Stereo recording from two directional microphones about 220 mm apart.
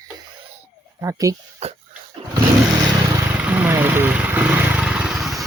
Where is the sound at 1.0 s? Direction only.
15° right (ahead or behind).